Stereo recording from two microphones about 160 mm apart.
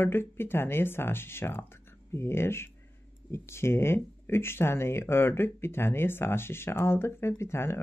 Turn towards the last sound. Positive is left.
turn(degrees=15)  # may be behind; listen again after turning